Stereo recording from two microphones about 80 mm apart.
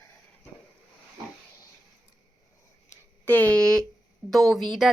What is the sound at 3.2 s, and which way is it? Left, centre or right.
A woman's voice, left.